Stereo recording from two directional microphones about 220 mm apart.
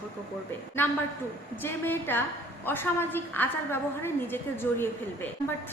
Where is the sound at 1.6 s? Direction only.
10° left (ahead or behind).